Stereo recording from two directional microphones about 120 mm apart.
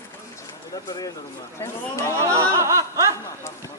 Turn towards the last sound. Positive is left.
turn(degrees=-25)  # may be behind; listen again after turning